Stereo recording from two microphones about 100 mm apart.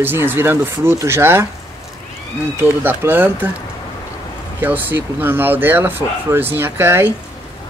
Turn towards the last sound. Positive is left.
turn(degrees=-25)  # may be behind; listen again after turning